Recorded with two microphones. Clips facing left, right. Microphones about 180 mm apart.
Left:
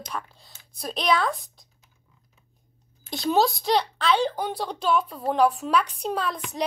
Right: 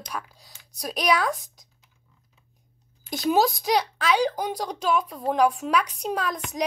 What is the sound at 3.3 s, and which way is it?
Speech, 10° right (ahead or behind).